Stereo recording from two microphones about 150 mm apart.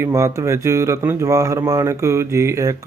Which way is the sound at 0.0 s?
20° right (ahead or behind).